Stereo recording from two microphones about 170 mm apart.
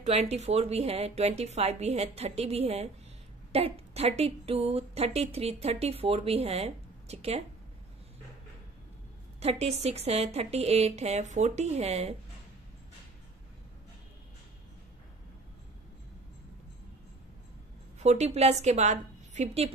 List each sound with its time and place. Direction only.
0.0 s a woman's voice: 40° right (ahead or behind)
9.4 s a woman's voice: 40° right (ahead or behind)
17.9 s a woman's voice: 40° right (ahead or behind)